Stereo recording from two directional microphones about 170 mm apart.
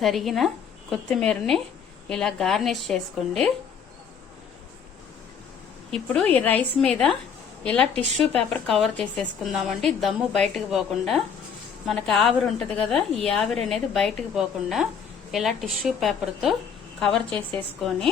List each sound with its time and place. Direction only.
0.0 s a woman's voice: centre (ahead or behind)
5.9 s a woman's voice: 10° left (ahead or behind)
8.0 s speech: 40° right (ahead or behind)
8.3 s a woman's voice: 5° left (ahead or behind)